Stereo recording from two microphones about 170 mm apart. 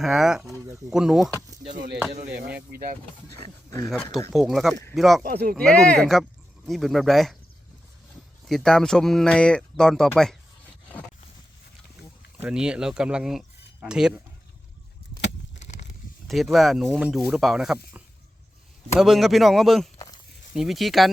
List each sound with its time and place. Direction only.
0.0 s speech: centre (ahead or behind)
2.1 s speech: 65° right (ahead or behind)
4.3 s speech: centre (ahead or behind)
5.2 s speech: 65° right (ahead or behind)
5.5 s speech: 5° left (ahead or behind)
8.4 s speech: centre (ahead or behind)
12.4 s speech: 5° right (ahead or behind)
16.2 s speech: centre (ahead or behind)
18.9 s speech: centre (ahead or behind)